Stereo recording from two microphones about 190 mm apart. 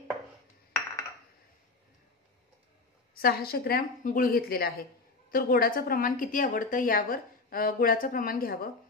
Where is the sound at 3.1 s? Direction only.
50° left (ahead or behind).